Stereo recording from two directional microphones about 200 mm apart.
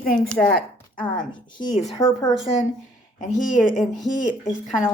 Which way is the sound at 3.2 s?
40° left (ahead or behind).